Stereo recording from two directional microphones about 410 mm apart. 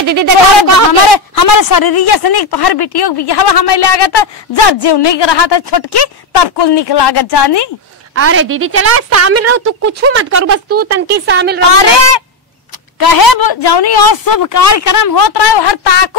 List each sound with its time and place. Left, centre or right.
0.0 s speech: right
1.0 s speech: left
8.1 s a woman's voice: right
11.7 s fowl: left
13.0 s a woman's voice: left